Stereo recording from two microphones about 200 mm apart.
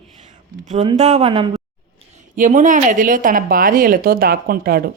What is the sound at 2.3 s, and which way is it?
A woman's voice, 40° right (ahead or behind).